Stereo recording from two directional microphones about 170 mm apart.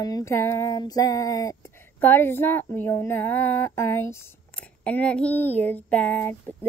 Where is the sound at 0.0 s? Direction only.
20° left (ahead or behind).